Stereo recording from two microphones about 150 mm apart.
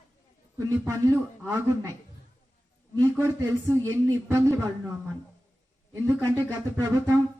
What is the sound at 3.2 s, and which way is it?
Speech, 20° right (ahead or behind).